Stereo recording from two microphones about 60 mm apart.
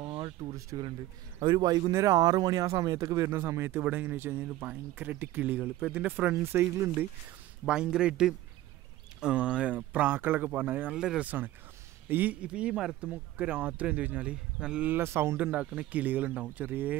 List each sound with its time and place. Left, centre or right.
0.5 s speech: right
1.7 s speech: right
3.3 s speech: right
3.9 s speech: right
7.6 s a man's voice: centre; by 10.9 s right
10.9 s a man's voice: centre
11.2 s speech: right
12.4 s a man's voice: centre
14.3 s a man's voice: centre
14.9 s speech: right
15.3 s speech: right